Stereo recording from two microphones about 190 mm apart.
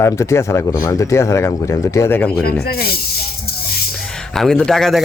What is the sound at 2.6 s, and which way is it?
Speech, 55° left (ahead or behind).